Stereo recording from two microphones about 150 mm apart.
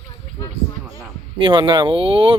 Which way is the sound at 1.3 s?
35° right (ahead or behind).